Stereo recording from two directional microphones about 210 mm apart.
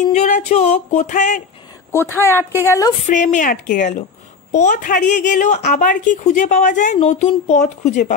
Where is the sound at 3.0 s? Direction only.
35° left (ahead or behind).